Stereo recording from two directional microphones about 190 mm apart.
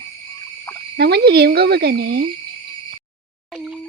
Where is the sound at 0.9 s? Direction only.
60° right (ahead or behind).